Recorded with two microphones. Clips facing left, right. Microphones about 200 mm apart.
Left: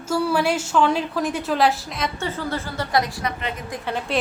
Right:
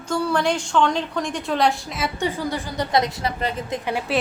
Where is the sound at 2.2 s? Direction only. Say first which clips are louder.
Right 2 dB; 15° right (ahead or behind).